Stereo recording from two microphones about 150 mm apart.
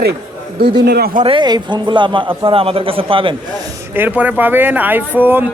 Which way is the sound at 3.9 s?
10° right (ahead or behind).